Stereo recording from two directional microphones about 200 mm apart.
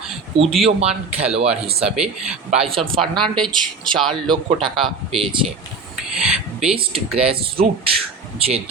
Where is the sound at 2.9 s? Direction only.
25° right (ahead or behind).